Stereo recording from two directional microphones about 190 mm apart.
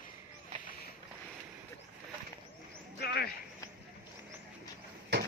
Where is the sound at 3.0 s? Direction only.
55° left (ahead or behind).